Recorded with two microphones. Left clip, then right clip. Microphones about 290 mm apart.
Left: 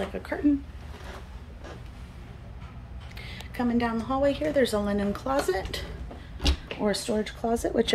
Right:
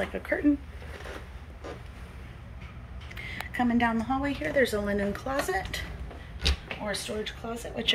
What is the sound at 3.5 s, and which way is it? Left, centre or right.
A woman's voice, centre.